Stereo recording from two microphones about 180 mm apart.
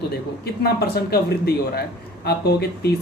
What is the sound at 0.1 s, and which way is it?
Speech, 60° left (ahead or behind).